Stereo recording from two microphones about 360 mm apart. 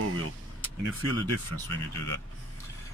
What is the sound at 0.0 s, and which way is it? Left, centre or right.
Vehicle, right.